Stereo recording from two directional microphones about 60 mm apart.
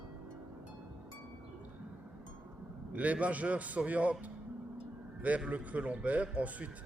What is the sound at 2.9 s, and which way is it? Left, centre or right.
A man's voice, right.